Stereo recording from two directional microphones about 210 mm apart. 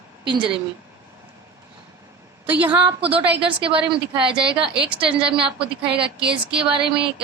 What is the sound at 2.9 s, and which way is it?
Speech, 25° right (ahead or behind).